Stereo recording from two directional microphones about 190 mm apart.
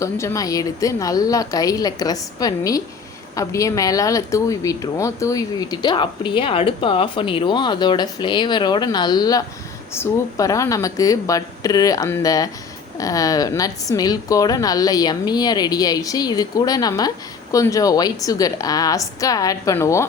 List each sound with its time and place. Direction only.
0.0 s a woman's voice: 15° left (ahead or behind)